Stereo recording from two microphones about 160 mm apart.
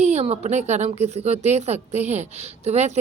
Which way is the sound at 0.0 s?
40° right (ahead or behind).